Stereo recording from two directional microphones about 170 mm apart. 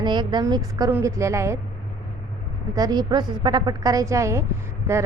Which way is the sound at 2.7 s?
25° right (ahead or behind).